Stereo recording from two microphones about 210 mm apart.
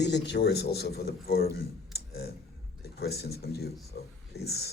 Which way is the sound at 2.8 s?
50° left (ahead or behind).